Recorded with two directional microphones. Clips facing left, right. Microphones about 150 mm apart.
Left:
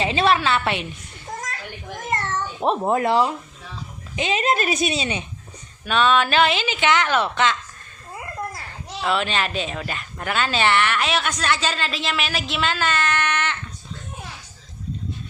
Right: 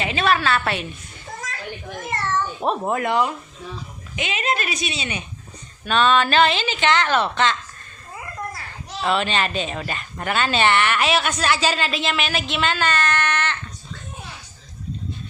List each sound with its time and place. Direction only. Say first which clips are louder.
0.0 s a woman's voice: left 1 dB; 30° left (ahead or behind)
2.6 s a woman's voice: left 4 dB; 25° left (ahead or behind)
5.8 s a woman's voice: right 1 dB; 5° left (ahead or behind)
9.0 s a woman's voice: right 1 dB; centre (ahead or behind)